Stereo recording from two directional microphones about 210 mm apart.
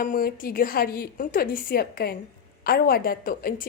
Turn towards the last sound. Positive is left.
turn(degrees=45)  # may be behind; listen again after turning